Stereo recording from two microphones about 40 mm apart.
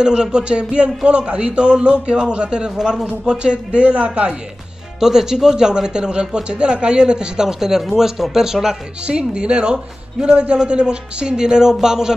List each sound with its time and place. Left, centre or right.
0.0 s a man's voice: right
2.8 s speech: centre
3.3 s a man's voice: right
5.0 s a man's voice: centre
7.8 s speech: centre
9.0 s a man's voice: right